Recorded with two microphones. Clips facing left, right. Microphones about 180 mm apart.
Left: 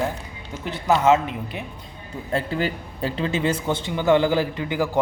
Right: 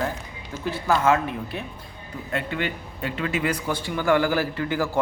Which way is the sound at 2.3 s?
35° left (ahead or behind).